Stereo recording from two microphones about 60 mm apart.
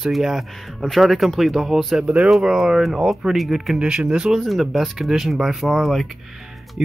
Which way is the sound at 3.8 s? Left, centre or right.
Centre.